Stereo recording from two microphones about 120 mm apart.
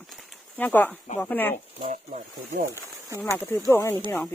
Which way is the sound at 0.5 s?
15° left (ahead or behind).